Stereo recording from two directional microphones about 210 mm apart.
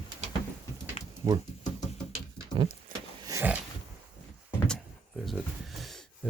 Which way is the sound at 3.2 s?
10° right (ahead or behind).